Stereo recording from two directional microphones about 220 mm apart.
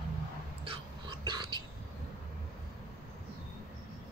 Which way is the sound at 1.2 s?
20° right (ahead or behind).